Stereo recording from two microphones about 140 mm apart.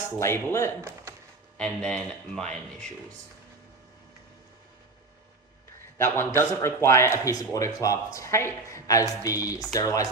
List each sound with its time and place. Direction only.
0.2 s a man's voice: 20° left (ahead or behind)
0.8 s speech: 20° right (ahead or behind)
1.5 s speech: 10° left (ahead or behind)
6.0 s a man's voice: 15° left (ahead or behind)